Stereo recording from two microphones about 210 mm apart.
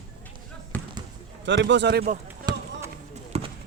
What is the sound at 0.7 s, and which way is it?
Basketball bounce, 5° left (ahead or behind).